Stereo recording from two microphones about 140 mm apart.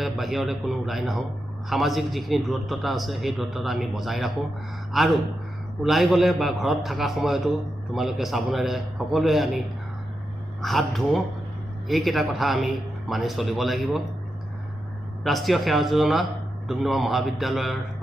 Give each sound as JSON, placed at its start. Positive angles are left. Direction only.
{"t": 0.0, "sound": "a man's voice", "side_deg": 0}
{"t": 10.6, "sound": "a man's voice", "side_deg": 0}
{"t": 15.2, "sound": "a man's voice", "side_deg": 0}